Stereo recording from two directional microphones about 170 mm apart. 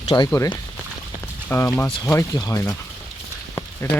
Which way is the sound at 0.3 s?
15° left (ahead or behind).